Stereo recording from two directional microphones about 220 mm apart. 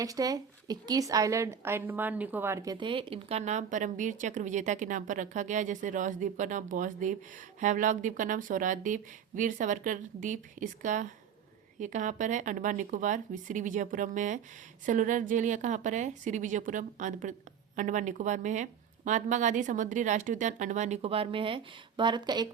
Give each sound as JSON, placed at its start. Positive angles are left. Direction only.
{"t": 0.0, "sound": "a woman's voice", "side_deg": -15}